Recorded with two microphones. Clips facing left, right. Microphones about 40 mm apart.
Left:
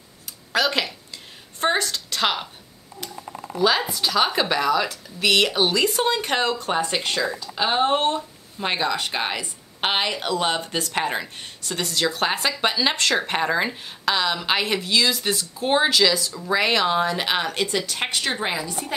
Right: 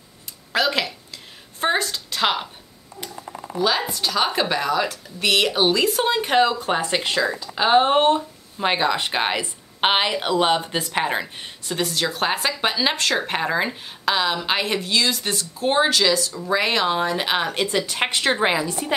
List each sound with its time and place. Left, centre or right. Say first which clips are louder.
0.5 s a sound: right 1 dB; centre
3.6 s speech: left 2 dB; centre
7.8 s a woman's voice: right 3 dB; centre